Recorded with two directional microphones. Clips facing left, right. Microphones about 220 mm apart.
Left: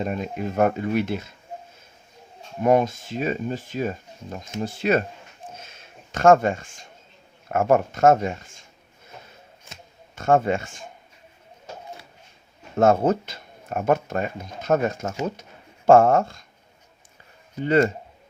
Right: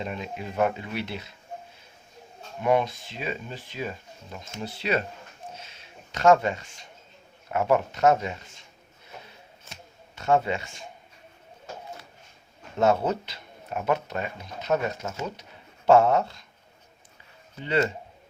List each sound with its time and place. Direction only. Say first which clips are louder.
0.0 s speech: left 6 dB; 45° left (ahead or behind)
2.6 s speech: left 4 dB; 45° left (ahead or behind)
5.5 s a sound: left 1 dB; 50° left (ahead or behind)
7.5 s speech: left 4 dB; 50° left (ahead or behind)
10.2 s speech: left 4 dB; 50° left (ahead or behind)
12.8 s speech: left 5 dB; 50° left (ahead or behind)
17.6 s speech: left 6 dB; 50° left (ahead or behind)